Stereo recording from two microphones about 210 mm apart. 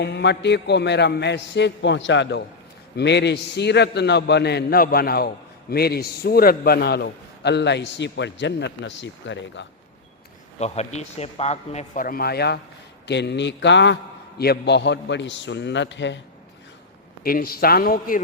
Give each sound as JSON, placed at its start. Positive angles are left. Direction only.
{"t": 0.0, "sound": "a man's voice", "side_deg": 55}
{"t": 10.6, "sound": "a man's voice", "side_deg": 30}
{"t": 17.2, "sound": "a man's voice", "side_deg": 45}